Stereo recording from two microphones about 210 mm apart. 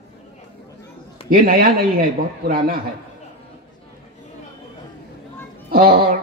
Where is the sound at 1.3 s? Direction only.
45° right (ahead or behind).